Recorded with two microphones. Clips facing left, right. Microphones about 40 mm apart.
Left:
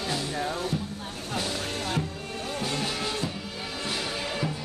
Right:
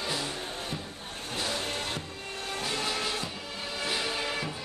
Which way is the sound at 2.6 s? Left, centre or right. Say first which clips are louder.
Left 1 dB; centre.